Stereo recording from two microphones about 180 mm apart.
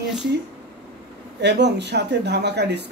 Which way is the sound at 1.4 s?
70° right (ahead or behind).